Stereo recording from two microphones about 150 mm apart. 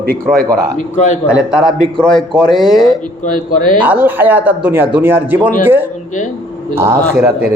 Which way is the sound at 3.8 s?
10° right (ahead or behind).